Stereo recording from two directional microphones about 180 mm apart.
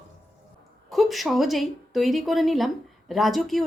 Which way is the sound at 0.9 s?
Centre (ahead or behind).